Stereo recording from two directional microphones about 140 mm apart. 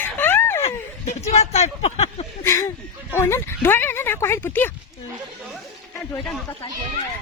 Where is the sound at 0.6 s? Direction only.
50° left (ahead or behind).